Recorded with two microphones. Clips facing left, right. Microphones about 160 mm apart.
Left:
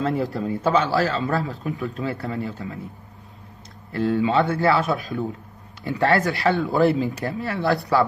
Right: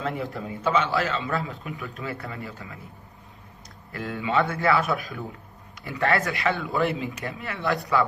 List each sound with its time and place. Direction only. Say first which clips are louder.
0.0 s a man's voice: left 6 dB; 35° left (ahead or behind)
3.9 s a man's voice: left 6 dB; 30° left (ahead or behind)